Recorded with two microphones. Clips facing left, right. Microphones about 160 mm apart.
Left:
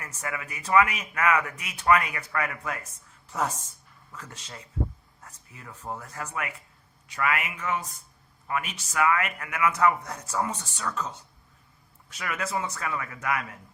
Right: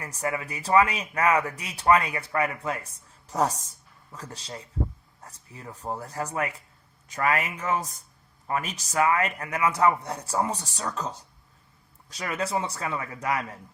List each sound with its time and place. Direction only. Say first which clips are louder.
0.0 s speech: right 5 dB; 30° right (ahead or behind)